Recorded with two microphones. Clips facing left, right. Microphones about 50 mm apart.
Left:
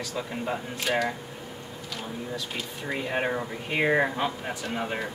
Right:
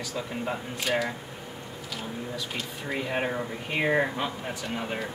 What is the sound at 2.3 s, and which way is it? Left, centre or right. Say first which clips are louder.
Speech: even; centre.